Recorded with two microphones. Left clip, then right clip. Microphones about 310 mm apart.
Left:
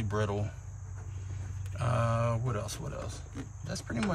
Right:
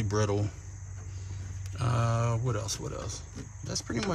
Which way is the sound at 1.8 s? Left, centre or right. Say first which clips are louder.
Left 1 dB; right.